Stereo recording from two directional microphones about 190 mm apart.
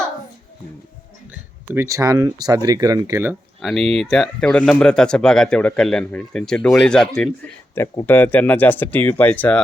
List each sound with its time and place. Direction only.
1.3 s speech: 15° right (ahead or behind)
3.6 s speech: centre (ahead or behind)